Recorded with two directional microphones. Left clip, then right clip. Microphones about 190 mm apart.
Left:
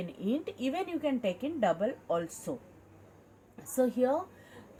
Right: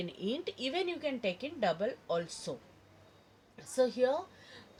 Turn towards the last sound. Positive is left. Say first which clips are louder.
# left 1 dB
turn(degrees=-50)  # may be behind; listen again after turning